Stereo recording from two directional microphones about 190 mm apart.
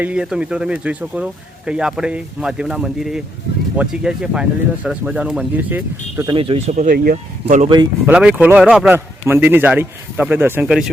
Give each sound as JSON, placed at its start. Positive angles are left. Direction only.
{"t": 0.0, "sound": "speech", "side_deg": -5}
{"t": 6.2, "sound": "speech", "side_deg": -30}
{"t": 6.7, "sound": "speech", "side_deg": -50}
{"t": 8.0, "sound": "a man's voice", "side_deg": -5}